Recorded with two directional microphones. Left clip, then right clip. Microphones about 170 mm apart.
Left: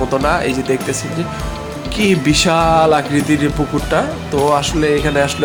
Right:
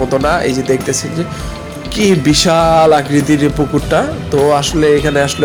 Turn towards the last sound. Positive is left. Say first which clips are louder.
# right 3 dB
turn(degrees=-10)  # may be behind; listen again after turning